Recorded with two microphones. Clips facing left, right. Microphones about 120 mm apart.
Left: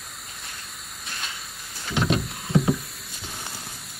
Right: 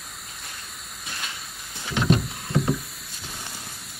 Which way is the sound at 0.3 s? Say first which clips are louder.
Even; centre (ahead or behind).